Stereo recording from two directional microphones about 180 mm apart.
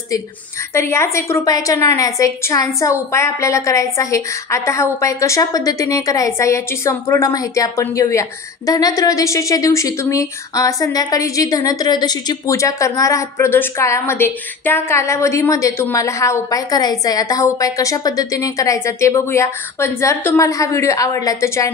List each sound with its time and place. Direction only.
0.7 s a woman's voice: 15° left (ahead or behind)